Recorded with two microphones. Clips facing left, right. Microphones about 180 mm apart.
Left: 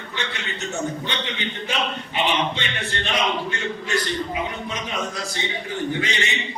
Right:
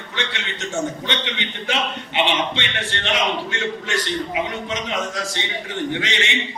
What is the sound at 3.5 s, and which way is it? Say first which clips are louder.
Speech: right 1 dB; 90° right.